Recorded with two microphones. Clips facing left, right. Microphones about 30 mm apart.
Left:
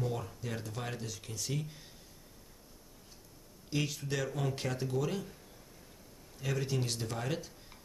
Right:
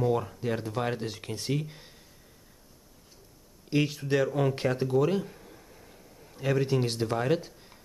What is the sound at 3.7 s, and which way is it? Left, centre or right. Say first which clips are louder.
Speech: right 9 dB; right.